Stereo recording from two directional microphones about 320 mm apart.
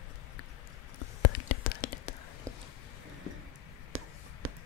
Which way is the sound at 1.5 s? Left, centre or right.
Left.